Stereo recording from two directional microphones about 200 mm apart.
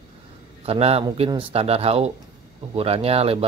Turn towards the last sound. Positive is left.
turn(degrees=-30)  # may be behind; listen again after turning